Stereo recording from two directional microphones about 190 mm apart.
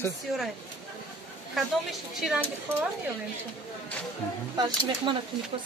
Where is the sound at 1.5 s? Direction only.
Centre (ahead or behind).